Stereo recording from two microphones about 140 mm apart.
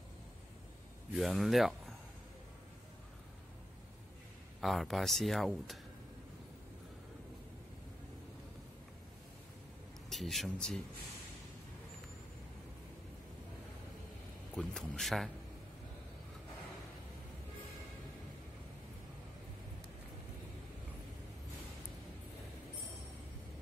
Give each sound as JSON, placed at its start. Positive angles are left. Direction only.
{"t": 1.1, "sound": "speech", "side_deg": 0}
{"t": 4.6, "sound": "speech", "side_deg": 0}
{"t": 10.0, "sound": "speech", "side_deg": 0}
{"t": 14.5, "sound": "speech", "side_deg": 0}